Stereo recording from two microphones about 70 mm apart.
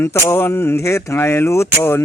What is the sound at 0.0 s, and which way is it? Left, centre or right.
Speech, left.